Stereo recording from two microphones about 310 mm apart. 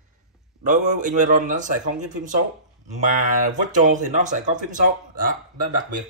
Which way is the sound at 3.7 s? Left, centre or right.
Right.